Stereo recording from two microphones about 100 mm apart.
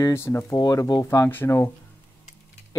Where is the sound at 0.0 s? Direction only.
25° left (ahead or behind).